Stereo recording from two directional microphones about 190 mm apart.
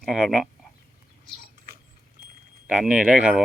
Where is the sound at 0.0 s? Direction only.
Centre (ahead or behind).